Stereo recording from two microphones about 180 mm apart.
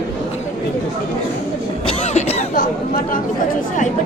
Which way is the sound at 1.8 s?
35° left (ahead or behind).